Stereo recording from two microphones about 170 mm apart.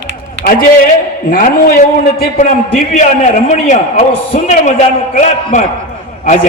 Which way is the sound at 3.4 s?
45° left (ahead or behind).